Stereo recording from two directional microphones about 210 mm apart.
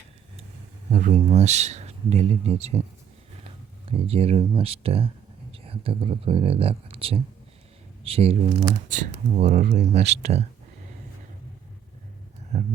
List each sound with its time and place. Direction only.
0.9 s speech: 35° right (ahead or behind)
3.8 s speech: 25° right (ahead or behind)
12.5 s a sound: 35° right (ahead or behind)